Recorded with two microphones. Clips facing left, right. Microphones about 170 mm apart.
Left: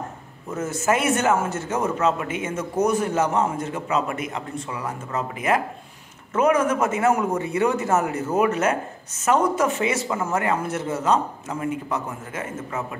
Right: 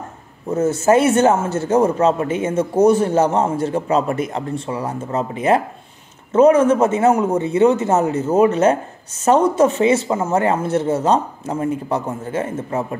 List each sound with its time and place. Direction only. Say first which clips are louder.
0.5 s a man's voice: right 8 dB; 30° right (ahead or behind)